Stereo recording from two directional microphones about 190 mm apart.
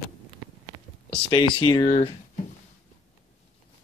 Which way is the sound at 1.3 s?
25° left (ahead or behind).